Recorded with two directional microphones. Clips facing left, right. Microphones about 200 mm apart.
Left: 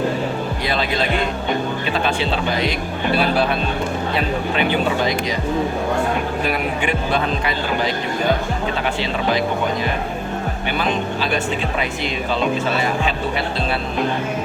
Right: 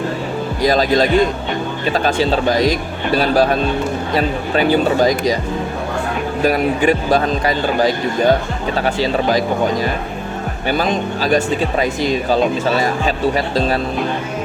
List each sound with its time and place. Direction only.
0.6 s speech: 40° right (ahead or behind)
6.4 s speech: 40° right (ahead or behind)
10.7 s speech: 40° right (ahead or behind)